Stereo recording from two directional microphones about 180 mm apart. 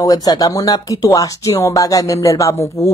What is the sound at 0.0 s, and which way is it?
Speech, 20° left (ahead or behind).